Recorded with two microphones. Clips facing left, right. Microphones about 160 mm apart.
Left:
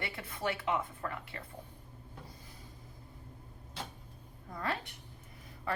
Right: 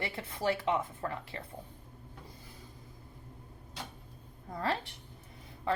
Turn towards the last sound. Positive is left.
turn(degrees=-30)  # may be behind; listen again after turning